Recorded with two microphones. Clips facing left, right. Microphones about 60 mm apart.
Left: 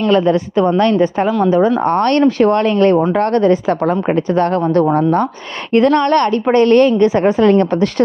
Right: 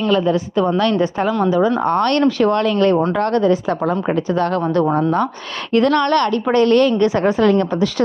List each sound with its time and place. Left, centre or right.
0.1 s a woman's voice: left
0.8 s a woman's voice: left
5.7 s a woman's voice: left
7.5 s a woman's voice: left